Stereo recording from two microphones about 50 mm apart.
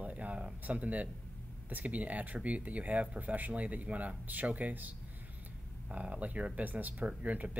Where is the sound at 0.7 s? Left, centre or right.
Right.